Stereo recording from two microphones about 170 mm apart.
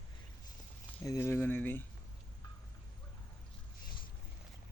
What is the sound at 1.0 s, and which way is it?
Speech, 15° left (ahead or behind).